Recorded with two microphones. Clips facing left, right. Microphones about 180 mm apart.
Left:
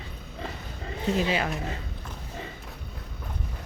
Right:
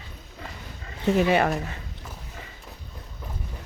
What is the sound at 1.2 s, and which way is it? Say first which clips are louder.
Speech: right 8 dB; 60° right (ahead or behind).